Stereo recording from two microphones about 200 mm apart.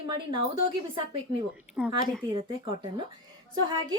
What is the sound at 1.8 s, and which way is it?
Speech, 5° right (ahead or behind).